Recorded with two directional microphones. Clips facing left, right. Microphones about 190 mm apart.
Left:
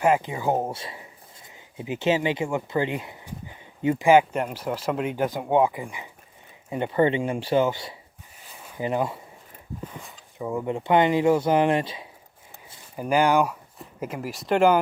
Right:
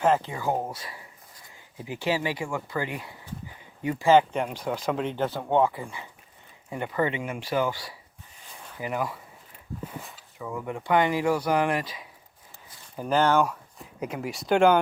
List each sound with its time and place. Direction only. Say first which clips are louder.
0.0 s speech: left 2 dB; 15° left (ahead or behind)
10.3 s speech: left 6 dB; 25° left (ahead or behind)
13.0 s speech: left 2 dB; 10° left (ahead or behind)